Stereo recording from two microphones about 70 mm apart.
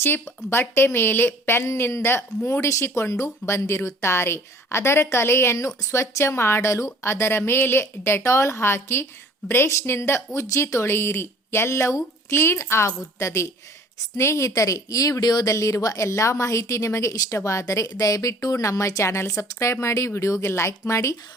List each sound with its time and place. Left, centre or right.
0.5 s a woman's voice: left
15.5 s a woman's voice: left